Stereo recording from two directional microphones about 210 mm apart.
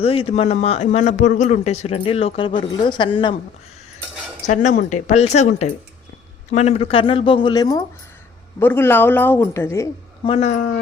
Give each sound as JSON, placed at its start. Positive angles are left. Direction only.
{"t": 0.0, "sound": "a man's voice", "side_deg": 25}
{"t": 4.4, "sound": "a man's voice", "side_deg": 35}
{"t": 10.2, "sound": "a man's voice", "side_deg": 30}